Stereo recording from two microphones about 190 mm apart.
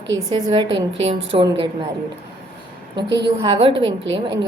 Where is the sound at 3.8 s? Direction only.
80° right.